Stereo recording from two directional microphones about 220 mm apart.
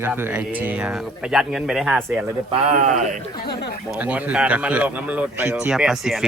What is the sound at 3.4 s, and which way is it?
Speech, 45° left (ahead or behind).